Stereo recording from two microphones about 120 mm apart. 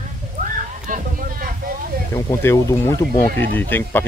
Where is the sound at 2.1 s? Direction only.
25° left (ahead or behind).